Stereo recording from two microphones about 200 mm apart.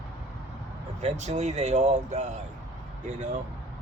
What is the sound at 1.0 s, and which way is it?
Speech, 35° right (ahead or behind).